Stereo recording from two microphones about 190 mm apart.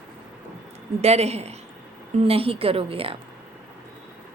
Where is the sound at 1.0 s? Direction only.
35° right (ahead or behind).